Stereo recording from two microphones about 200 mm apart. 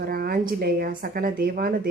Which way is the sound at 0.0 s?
50° right (ahead or behind).